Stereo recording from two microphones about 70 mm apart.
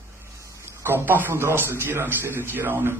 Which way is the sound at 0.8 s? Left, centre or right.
Right.